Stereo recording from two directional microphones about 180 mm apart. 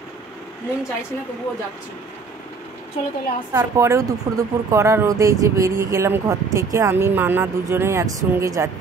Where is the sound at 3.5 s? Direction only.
15° right (ahead or behind).